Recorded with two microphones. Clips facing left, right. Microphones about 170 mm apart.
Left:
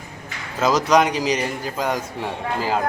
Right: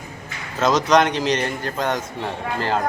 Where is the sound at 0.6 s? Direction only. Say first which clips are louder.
Even; 10° left (ahead or behind).